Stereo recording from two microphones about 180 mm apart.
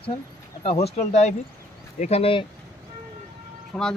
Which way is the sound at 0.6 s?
35° left (ahead or behind).